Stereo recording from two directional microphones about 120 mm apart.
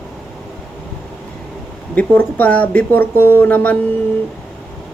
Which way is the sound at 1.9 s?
15° left (ahead or behind).